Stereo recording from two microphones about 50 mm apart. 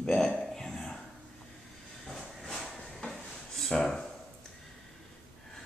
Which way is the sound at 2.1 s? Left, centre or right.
Centre.